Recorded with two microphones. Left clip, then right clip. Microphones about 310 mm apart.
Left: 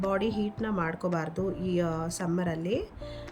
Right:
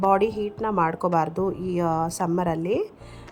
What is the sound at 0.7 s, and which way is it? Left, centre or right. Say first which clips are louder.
Speech: right 10 dB; right.